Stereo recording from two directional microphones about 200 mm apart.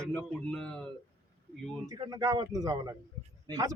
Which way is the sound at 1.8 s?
20° right (ahead or behind).